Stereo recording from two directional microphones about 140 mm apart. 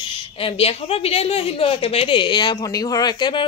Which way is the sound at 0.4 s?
40° left (ahead or behind).